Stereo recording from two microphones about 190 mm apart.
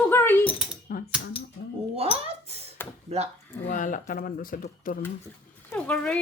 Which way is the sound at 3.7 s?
45° left (ahead or behind).